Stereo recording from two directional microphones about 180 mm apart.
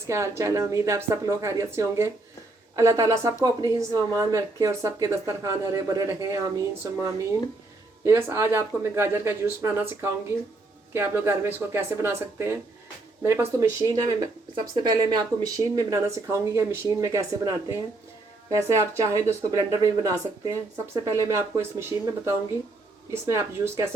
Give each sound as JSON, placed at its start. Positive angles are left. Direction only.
{"t": 0.1, "sound": "a woman's voice", "side_deg": -15}